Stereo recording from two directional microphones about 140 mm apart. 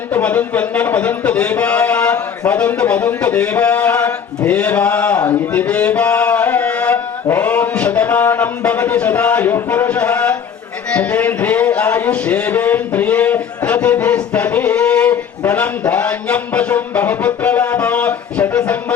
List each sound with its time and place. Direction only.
0.1 s a man's voice: 10° left (ahead or behind)
5.5 s a sound: 10° left (ahead or behind)
10.9 s speech: 10° left (ahead or behind)
15.9 s music: 10° left (ahead or behind)